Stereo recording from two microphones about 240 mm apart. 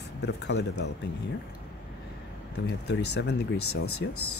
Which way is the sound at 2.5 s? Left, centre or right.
Left.